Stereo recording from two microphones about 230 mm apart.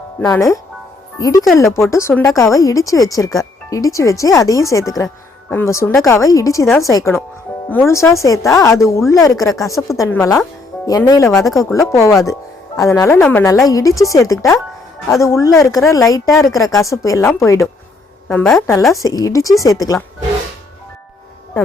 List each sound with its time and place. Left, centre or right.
0.2 s speech: centre